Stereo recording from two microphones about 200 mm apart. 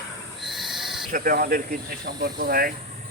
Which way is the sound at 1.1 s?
45° right (ahead or behind).